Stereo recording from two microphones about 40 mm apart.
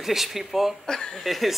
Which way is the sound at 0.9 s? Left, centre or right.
Centre.